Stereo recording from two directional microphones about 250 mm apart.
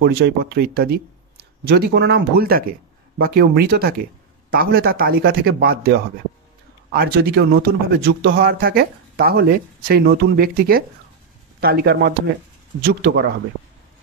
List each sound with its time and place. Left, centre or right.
0.0 s speech: right